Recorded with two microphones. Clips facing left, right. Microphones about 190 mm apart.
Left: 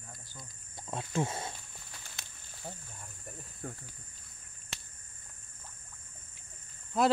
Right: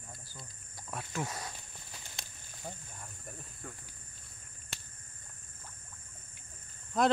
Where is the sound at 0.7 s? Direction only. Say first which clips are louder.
Left 5 dB; 25° left (ahead or behind).